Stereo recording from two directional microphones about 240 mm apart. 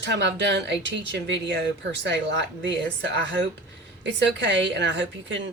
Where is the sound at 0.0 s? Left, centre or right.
Right.